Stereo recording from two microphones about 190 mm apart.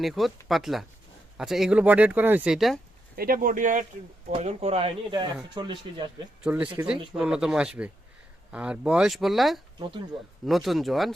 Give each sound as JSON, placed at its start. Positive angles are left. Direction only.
{"t": 0.0, "sound": "speech", "side_deg": 0}
{"t": 3.2, "sound": "speech", "side_deg": -50}
{"t": 4.3, "sound": "speech", "side_deg": -30}
{"t": 6.4, "sound": "speech", "side_deg": -5}
{"t": 9.7, "sound": "speech", "side_deg": -25}
{"t": 10.4, "sound": "speech", "side_deg": 0}